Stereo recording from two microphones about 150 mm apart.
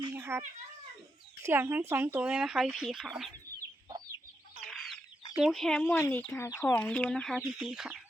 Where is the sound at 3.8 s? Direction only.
25° right (ahead or behind).